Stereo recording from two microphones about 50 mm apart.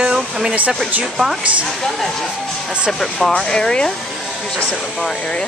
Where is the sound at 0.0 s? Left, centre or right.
Centre.